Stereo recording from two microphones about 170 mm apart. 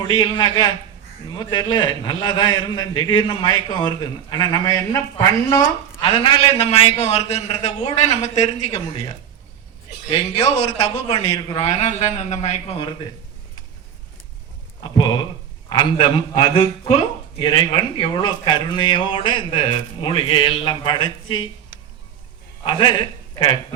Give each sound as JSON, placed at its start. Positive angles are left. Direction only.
{"t": 0.1, "sound": "speech", "side_deg": 30}
{"t": 6.0, "sound": "a man's voice", "side_deg": 35}
{"t": 10.1, "sound": "a man's voice", "side_deg": 35}
{"t": 11.6, "sound": "a man's voice", "side_deg": 45}
{"t": 14.9, "sound": "speech", "side_deg": 25}
{"t": 22.6, "sound": "a man's voice", "side_deg": 25}